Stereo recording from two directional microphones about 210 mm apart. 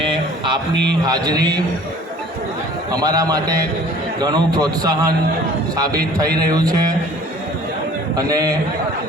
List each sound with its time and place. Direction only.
0.0 s a sound: 20° right (ahead or behind)
1.0 s a man's voice: 20° right (ahead or behind)
2.9 s a man's voice: 20° right (ahead or behind)
8.3 s a man's voice: 15° right (ahead or behind)